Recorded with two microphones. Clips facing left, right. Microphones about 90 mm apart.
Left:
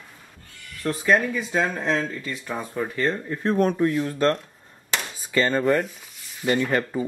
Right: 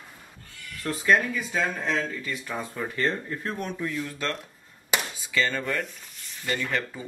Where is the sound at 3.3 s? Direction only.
30° left (ahead or behind).